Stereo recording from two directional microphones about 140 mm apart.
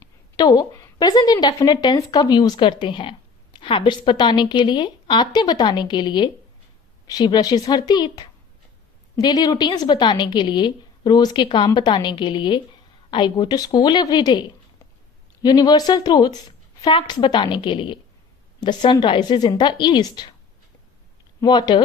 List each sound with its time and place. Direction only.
0.3 s a woman's voice: 30° left (ahead or behind)
21.4 s a woman's voice: 30° left (ahead or behind)